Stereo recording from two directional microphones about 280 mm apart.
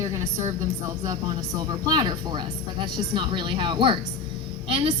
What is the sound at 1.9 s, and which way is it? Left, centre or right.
A woman's voice, centre.